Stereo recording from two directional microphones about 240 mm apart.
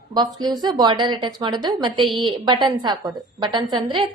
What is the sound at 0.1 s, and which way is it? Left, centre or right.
A woman's voice, centre.